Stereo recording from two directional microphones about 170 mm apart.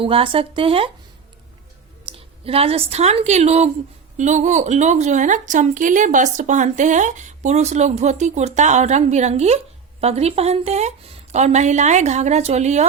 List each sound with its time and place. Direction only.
0.0 s a woman's voice: 30° right (ahead or behind)
2.1 s a woman's voice: 35° right (ahead or behind)